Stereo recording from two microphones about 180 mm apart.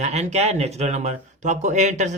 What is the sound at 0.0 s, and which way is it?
Speech, 40° right (ahead or behind).